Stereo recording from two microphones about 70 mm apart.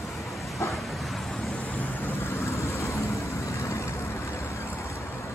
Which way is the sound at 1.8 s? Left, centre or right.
Left.